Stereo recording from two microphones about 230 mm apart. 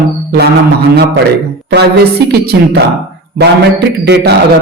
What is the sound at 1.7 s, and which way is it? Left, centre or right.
Music, right.